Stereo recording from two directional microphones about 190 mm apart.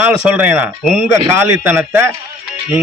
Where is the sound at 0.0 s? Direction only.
10° right (ahead or behind).